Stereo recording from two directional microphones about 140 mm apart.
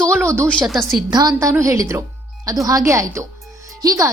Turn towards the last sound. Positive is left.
turn(degrees=-25)  # may be behind; listen again after turning